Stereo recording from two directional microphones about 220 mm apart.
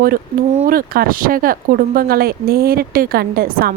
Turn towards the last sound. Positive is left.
turn(degrees=-40)  # may be behind; listen again after turning